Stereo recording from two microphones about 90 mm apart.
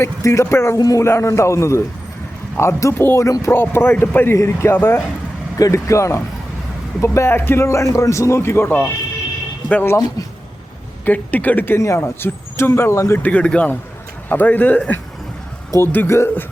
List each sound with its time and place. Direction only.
0.0 s a man's voice: 35° left (ahead or behind)
0.8 s speech: 45° left (ahead or behind)
1.0 s a man's voice: 30° left (ahead or behind)
3.5 s a man's voice: 25° left (ahead or behind)
5.5 s a man's voice: 35° left (ahead or behind)
11.0 s a man's voice: 20° left (ahead or behind)
13.2 s a man's voice: 15° left (ahead or behind)